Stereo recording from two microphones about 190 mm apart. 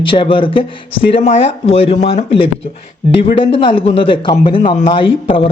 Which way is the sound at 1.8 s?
30° left (ahead or behind).